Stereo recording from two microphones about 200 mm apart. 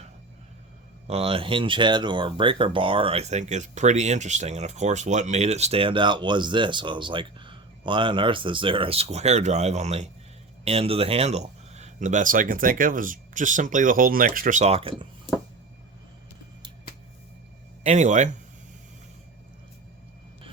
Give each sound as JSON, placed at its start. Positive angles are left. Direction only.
{"t": 1.0, "sound": "speech", "side_deg": -30}
{"t": 17.8, "sound": "speech", "side_deg": -35}